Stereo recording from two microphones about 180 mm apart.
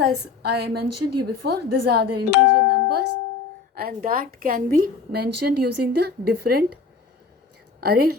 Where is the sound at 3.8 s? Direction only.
50° right (ahead or behind).